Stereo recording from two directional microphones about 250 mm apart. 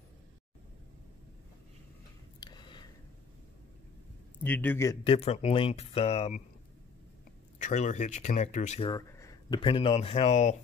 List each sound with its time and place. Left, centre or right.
2.4 s a sound: centre
4.4 s speech: centre; by 6.4 s left
7.5 s speech: left
8.9 s speech: centre